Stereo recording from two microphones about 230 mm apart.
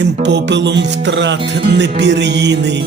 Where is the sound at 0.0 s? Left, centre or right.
Right.